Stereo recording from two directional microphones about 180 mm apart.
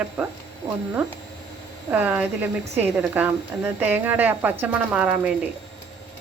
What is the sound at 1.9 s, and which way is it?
Speech, 10° right (ahead or behind).